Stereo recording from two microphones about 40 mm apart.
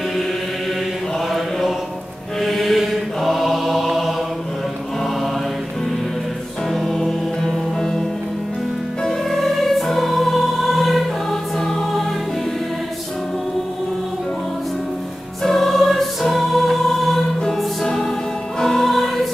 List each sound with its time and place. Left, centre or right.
2.4 s mantra: centre
6.7 s music: centre
9.0 s music: centre
11.2 s music: centre
15.4 s music: centre